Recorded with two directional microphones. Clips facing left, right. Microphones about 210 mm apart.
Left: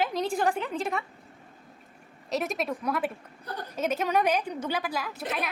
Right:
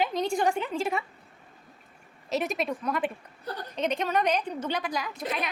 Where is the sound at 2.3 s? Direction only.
Centre (ahead or behind).